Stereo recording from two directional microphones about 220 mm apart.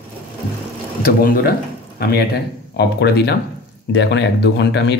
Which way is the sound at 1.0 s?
40° left (ahead or behind).